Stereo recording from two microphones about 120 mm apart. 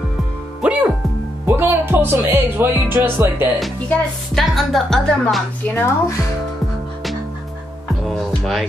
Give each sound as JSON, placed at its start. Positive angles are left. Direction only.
{"t": 0.6, "sound": "music", "side_deg": -10}
{"t": 1.6, "sound": "speech", "side_deg": -20}
{"t": 3.9, "sound": "a woman's voice", "side_deg": 0}
{"t": 8.1, "sound": "music", "side_deg": 0}